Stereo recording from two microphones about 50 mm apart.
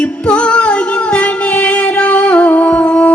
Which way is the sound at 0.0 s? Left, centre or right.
Left.